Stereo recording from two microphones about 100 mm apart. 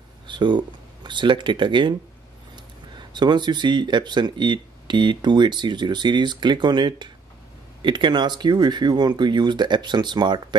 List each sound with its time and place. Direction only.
0.3 s speech: 50° right (ahead or behind)
3.1 s speech: 45° right (ahead or behind)